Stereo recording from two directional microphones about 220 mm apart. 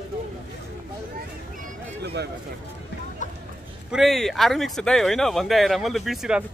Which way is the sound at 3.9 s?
Centre (ahead or behind).